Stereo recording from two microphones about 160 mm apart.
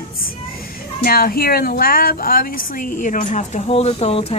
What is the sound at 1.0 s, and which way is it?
Speech, 70° left (ahead or behind).